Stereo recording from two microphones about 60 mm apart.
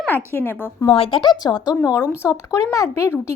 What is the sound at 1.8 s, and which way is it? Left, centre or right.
Speech, left.